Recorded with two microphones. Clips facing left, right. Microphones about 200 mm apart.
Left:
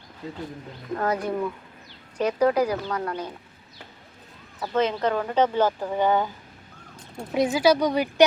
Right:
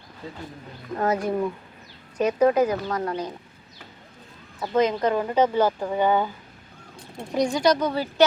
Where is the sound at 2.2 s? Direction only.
10° right (ahead or behind).